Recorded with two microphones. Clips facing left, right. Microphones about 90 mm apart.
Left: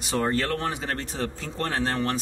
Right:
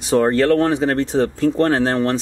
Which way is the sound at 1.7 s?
80° right.